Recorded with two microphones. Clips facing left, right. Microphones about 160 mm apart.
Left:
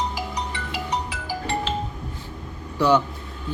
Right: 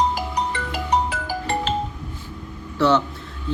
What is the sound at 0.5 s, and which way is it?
Music, 50° right (ahead or behind).